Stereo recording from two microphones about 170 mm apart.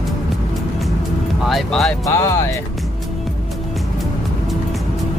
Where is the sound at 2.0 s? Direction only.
20° left (ahead or behind).